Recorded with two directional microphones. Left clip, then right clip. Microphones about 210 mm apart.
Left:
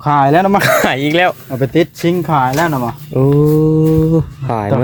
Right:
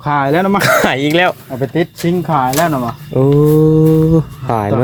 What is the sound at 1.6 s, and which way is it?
Speech, 55° left (ahead or behind).